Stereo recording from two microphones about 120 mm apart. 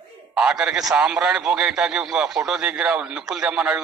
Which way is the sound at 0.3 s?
5° right (ahead or behind).